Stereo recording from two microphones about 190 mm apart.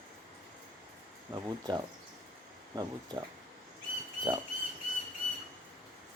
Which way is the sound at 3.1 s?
20° right (ahead or behind).